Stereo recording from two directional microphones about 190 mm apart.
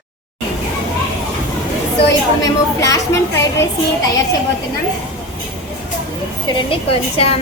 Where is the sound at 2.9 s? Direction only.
15° left (ahead or behind).